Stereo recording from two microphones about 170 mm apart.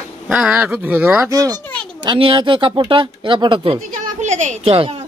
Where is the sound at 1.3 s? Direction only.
20° right (ahead or behind).